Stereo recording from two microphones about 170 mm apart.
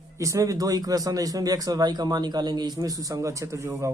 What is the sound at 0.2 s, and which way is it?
Speech, 20° right (ahead or behind).